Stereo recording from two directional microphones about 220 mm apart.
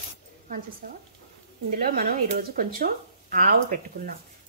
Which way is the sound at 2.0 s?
40° right (ahead or behind).